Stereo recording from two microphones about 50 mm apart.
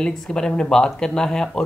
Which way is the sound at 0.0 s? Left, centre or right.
Centre.